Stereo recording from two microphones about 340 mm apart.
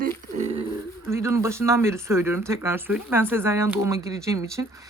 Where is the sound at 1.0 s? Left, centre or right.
Centre.